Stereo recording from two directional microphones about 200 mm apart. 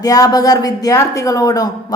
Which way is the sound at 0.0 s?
20° left (ahead or behind).